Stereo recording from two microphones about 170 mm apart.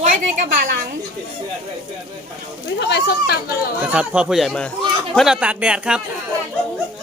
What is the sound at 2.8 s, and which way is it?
Speech, 80° left.